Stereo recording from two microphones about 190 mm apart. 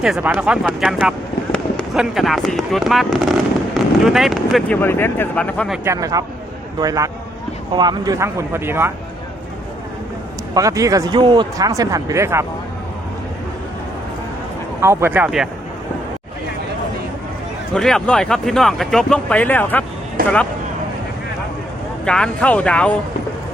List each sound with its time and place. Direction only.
0.0 s speech: 5° right (ahead or behind)
4.8 s speech: 10° left (ahead or behind)
5.8 s a man's voice: 15° right (ahead or behind)
10.5 s speech: 15° right (ahead or behind)
14.8 s speech: 10° right (ahead or behind)
17.7 s speech: 5° left (ahead or behind)
22.0 s speech: 5° left (ahead or behind)